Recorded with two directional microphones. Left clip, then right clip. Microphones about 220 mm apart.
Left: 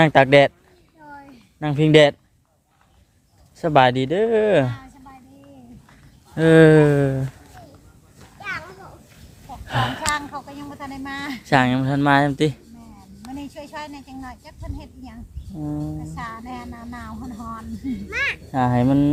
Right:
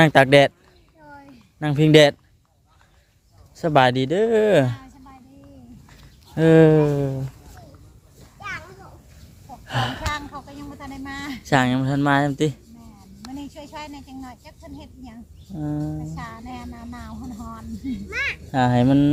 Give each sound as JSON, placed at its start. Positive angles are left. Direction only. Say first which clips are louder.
{"t": 0.0, "sound": "speech", "louder": "even", "side_deg": -10}
{"t": 1.1, "sound": "a sound", "louder": "left 3 dB", "side_deg": 0}
{"t": 1.5, "sound": "speech", "louder": "even", "side_deg": -15}
{"t": 3.5, "sound": "speech", "louder": "left 1 dB", "side_deg": -5}
{"t": 4.7, "sound": "a sound", "louder": "left 2 dB", "side_deg": 0}
{"t": 6.3, "sound": "speech", "louder": "left 1 dB", "side_deg": -10}
{"t": 6.7, "sound": "speech", "louder": "left 4 dB", "side_deg": 25}
{"t": 8.4, "sound": "children playing", "louder": "left 3 dB", "side_deg": 0}
{"t": 9.5, "sound": "speech", "louder": "left 2 dB", "side_deg": 5}
{"t": 15.5, "sound": "speech", "louder": "right 1 dB", "side_deg": -15}
{"t": 16.1, "sound": "speech", "louder": "left 3 dB", "side_deg": 5}
{"t": 18.5, "sound": "speech", "louder": "right 2 dB", "side_deg": -15}